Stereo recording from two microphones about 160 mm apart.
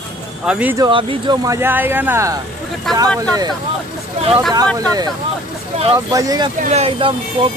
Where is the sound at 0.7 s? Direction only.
30° right (ahead or behind).